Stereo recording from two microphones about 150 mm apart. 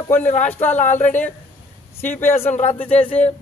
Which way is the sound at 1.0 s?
10° left (ahead or behind).